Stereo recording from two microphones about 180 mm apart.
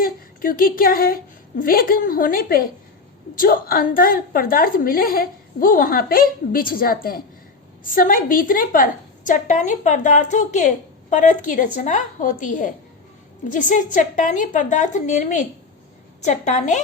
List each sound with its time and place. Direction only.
0.0 s a woman's voice: 50° left (ahead or behind)